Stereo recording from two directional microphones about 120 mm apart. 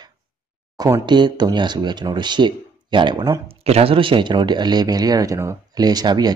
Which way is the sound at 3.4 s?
55° right (ahead or behind).